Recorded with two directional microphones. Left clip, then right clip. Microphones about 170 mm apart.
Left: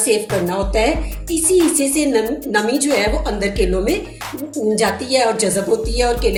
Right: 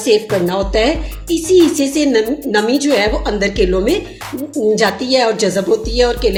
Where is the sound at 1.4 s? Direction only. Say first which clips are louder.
Right 4 dB; centre (ahead or behind).